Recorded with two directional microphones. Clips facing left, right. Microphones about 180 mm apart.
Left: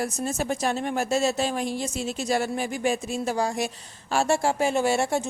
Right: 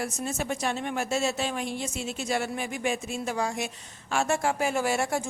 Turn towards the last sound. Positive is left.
turn(degrees=25)  # may be behind; listen again after turning